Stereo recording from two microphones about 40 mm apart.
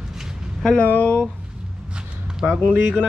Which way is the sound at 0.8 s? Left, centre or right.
Left.